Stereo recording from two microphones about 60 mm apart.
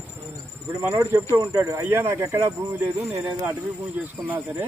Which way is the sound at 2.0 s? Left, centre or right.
Right.